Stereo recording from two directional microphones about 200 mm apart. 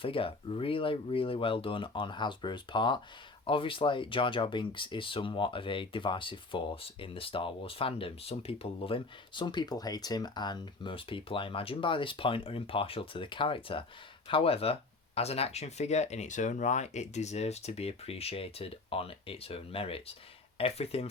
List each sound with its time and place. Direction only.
0.0 s speech: 25° left (ahead or behind)